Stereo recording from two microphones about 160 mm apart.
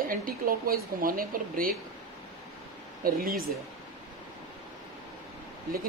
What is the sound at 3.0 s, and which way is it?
Speech, 65° right (ahead or behind).